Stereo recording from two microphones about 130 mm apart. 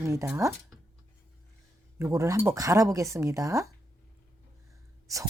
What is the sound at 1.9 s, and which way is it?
Speech, 20° right (ahead or behind).